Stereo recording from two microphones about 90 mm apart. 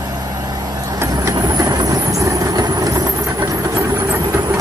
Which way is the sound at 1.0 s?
35° right (ahead or behind).